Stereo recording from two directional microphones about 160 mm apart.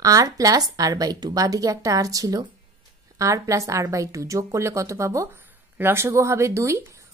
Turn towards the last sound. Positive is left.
turn(degrees=-20)  # may be behind; listen again after turning